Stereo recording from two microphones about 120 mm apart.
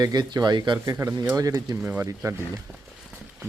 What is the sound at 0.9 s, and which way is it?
Speech, 25° right (ahead or behind).